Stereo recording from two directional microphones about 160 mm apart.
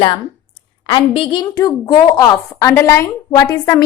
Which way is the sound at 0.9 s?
35° left (ahead or behind).